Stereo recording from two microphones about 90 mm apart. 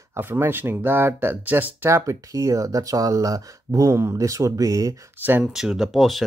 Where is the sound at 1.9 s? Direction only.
35° right (ahead or behind).